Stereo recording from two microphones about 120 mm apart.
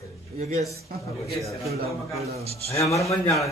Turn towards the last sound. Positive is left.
turn(degrees=25)  # may be behind; listen again after turning